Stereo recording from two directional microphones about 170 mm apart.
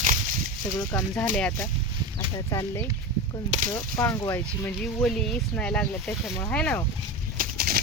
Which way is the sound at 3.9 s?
20° left (ahead or behind).